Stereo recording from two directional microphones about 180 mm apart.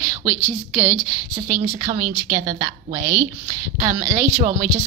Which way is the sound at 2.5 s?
45° right (ahead or behind).